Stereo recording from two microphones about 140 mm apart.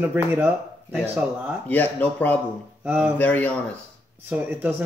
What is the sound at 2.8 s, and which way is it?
Speech, 10° right (ahead or behind).